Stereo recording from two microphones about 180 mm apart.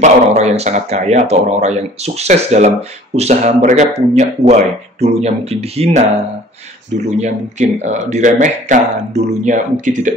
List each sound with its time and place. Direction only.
0.0 s a man's voice: 40° right (ahead or behind)
7.2 s speech: 40° right (ahead or behind)